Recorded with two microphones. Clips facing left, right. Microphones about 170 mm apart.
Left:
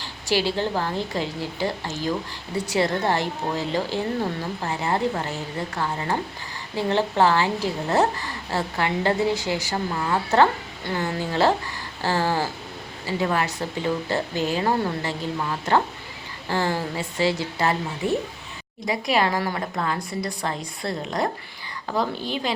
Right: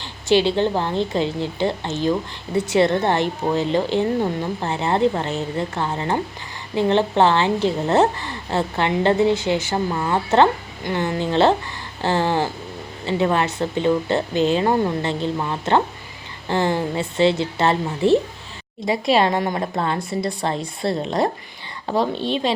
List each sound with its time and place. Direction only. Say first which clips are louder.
0.0 s speech: right 6 dB; 20° right (ahead or behind)